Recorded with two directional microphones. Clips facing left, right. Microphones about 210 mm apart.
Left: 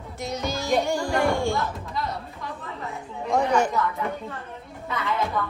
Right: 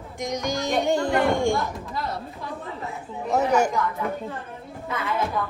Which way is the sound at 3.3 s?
5° right (ahead or behind).